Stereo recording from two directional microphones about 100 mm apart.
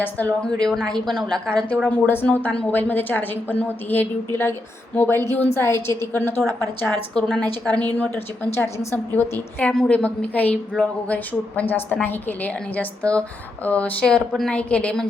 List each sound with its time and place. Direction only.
0.0 s a woman's voice: 15° left (ahead or behind)
7.1 s a woman's voice: 10° left (ahead or behind)
8.5 s a woman's voice: 25° left (ahead or behind)